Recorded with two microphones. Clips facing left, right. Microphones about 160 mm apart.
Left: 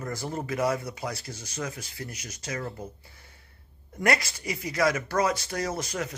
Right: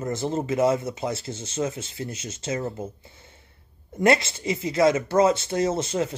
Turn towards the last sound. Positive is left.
turn(degrees=-25)  # may be behind; listen again after turning